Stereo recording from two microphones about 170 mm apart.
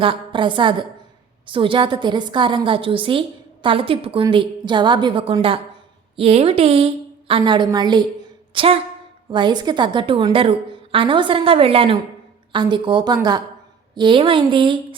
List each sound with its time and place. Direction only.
0.0 s a woman's voice: 30° right (ahead or behind)